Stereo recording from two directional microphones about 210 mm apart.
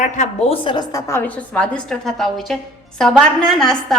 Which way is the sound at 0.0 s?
30° left (ahead or behind).